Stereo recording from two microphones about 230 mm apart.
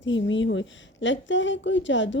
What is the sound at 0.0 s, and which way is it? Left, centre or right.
Speech, left.